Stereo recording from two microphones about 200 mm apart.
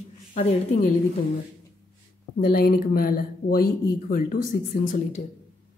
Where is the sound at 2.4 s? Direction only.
50° left (ahead or behind).